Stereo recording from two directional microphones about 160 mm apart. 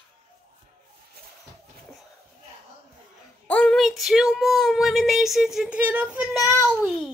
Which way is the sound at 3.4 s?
10° left (ahead or behind).